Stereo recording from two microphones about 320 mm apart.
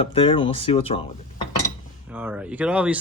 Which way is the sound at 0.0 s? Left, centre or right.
Centre.